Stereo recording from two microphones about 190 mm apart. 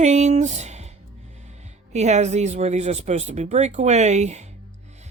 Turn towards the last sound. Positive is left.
turn(degrees=-35)  # may be behind; listen again after turning